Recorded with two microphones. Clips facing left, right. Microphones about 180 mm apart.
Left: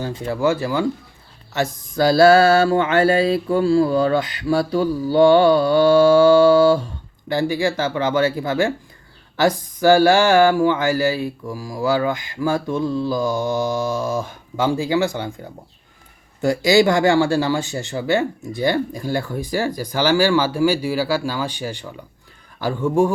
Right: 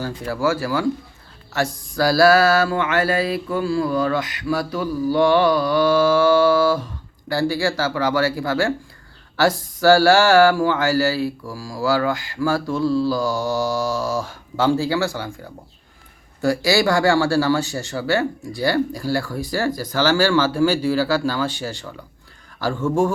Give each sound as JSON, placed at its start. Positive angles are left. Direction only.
{"t": 0.0, "sound": "mantra", "side_deg": 20}
{"t": 18.5, "sound": "speech", "side_deg": 20}